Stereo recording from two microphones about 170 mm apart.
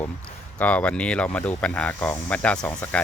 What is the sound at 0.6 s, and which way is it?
Speech, 10° left (ahead or behind).